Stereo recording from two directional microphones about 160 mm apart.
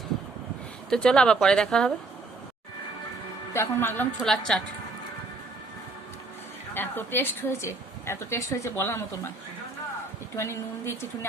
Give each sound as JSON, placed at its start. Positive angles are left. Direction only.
{"t": 0.9, "sound": "speech", "side_deg": 5}
{"t": 3.5, "sound": "a woman's voice", "side_deg": 15}
{"t": 4.2, "sound": "speech", "side_deg": 5}
{"t": 6.7, "sound": "a woman's voice", "side_deg": 15}
{"t": 10.3, "sound": "a woman's voice", "side_deg": 15}